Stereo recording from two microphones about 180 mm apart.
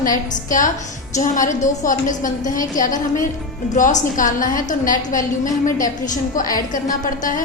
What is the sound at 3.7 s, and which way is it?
A woman's voice, 45° left (ahead or behind).